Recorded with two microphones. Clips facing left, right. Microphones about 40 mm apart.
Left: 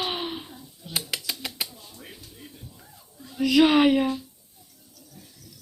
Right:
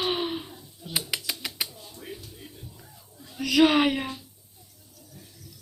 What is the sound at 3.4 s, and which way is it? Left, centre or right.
Speech, centre.